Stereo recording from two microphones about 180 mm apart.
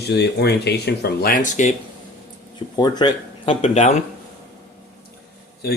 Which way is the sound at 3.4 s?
35° left (ahead or behind).